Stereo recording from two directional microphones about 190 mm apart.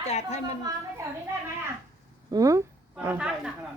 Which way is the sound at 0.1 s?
35° left (ahead or behind).